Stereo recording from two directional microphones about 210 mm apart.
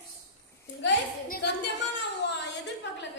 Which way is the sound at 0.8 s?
55° left (ahead or behind).